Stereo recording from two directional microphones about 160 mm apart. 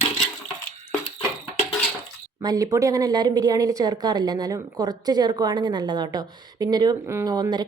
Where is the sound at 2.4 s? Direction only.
20° right (ahead or behind).